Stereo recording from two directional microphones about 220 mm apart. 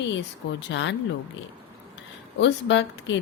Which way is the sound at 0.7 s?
55° left (ahead or behind).